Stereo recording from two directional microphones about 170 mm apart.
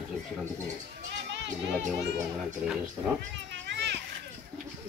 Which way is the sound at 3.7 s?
85° right.